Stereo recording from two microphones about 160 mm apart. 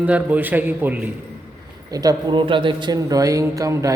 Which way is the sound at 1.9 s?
25° right (ahead or behind).